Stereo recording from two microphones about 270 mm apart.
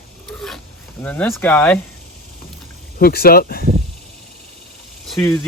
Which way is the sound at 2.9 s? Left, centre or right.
Left.